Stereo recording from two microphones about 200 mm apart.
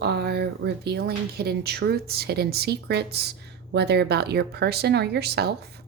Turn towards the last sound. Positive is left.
turn(degrees=-55)  # may be behind; listen again after turning